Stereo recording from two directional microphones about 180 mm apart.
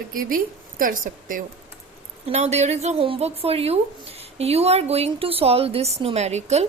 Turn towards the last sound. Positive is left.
turn(degrees=-40)  # may be behind; listen again after turning